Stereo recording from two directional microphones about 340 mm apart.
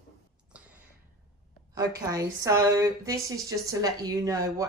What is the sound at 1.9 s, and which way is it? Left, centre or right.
Speech, centre.